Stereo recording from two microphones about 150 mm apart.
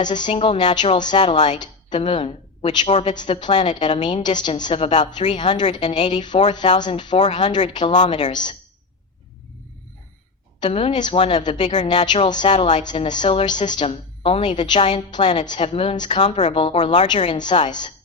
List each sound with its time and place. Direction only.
0.1 s a woman's voice: 30° left (ahead or behind)
10.6 s a woman's voice: 40° left (ahead or behind)